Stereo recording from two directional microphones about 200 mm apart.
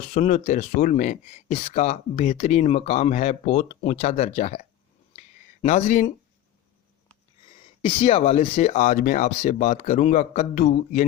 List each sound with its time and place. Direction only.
0.1 s speech: 35° left (ahead or behind)
5.6 s speech: 40° left (ahead or behind)
7.8 s speech: 25° left (ahead or behind)